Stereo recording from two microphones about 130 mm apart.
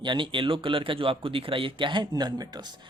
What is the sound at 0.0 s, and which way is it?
Speech, 40° right (ahead or behind).